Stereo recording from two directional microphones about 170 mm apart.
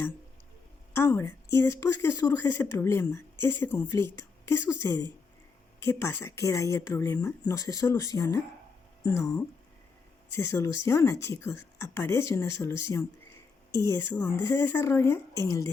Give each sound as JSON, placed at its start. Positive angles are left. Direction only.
{"t": 0.9, "sound": "speech", "side_deg": 15}